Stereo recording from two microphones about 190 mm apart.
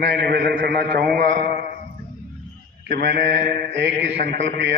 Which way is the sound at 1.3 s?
45° right (ahead or behind).